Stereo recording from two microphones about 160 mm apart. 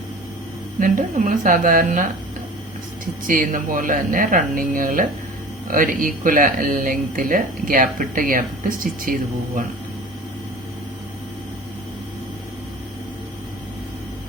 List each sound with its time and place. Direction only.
0.8 s speech: 55° right (ahead or behind)
3.2 s speech: 60° right (ahead or behind)